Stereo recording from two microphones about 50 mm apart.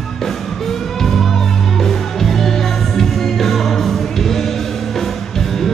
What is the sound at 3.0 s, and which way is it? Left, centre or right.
Music, centre.